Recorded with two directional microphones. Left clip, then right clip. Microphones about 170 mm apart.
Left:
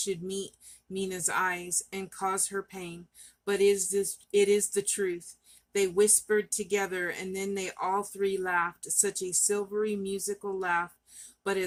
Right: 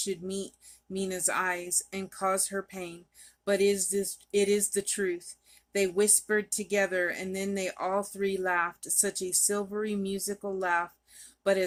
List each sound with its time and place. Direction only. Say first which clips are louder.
0.0 s speech: left 1 dB; 30° right (ahead or behind)